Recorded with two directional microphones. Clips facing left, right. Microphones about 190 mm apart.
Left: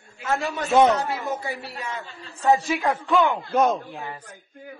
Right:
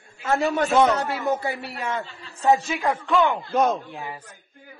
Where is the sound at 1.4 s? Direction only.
60° right (ahead or behind).